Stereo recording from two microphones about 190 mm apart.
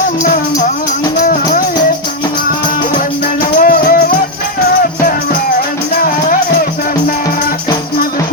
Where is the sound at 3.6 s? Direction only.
50° left (ahead or behind).